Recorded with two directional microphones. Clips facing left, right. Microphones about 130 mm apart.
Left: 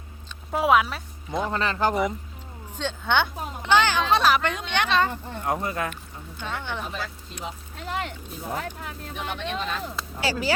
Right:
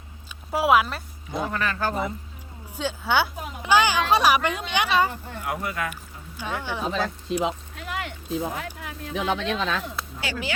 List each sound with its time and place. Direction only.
0.5 s speech: 5° right (ahead or behind)
1.3 s speech: 25° left (ahead or behind)
2.7 s speech: 5° right (ahead or behind)
5.4 s speech: 35° left (ahead or behind)
5.9 s speech: 10° right (ahead or behind)
7.3 s speech: 90° right
7.8 s a sound: 35° left (ahead or behind)
8.5 s speech: 35° left (ahead or behind)
9.1 s speech: 90° right
10.2 s speech: 35° left (ahead or behind)